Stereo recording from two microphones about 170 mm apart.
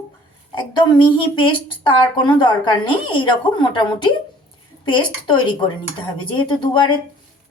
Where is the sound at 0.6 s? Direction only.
25° left (ahead or behind).